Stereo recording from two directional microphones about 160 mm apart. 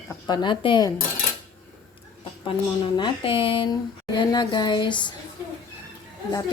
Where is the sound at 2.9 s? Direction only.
30° left (ahead or behind).